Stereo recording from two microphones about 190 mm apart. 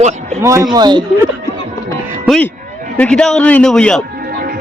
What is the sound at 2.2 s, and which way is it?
A man's voice, 5° left (ahead or behind).